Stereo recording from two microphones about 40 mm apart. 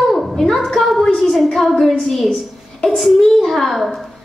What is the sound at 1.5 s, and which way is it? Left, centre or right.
Speech, centre.